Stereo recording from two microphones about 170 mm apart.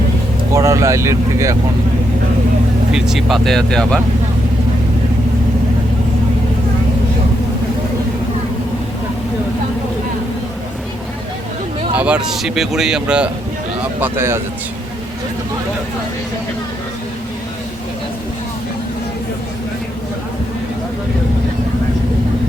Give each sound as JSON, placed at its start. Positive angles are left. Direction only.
{"t": 0.5, "sound": "speech", "side_deg": -15}
{"t": 2.9, "sound": "speech", "side_deg": 0}
{"t": 11.9, "sound": "speech", "side_deg": -5}